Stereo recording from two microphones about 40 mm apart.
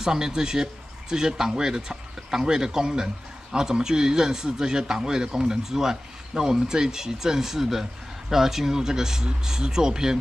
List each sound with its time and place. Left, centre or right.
0.0 s speech: centre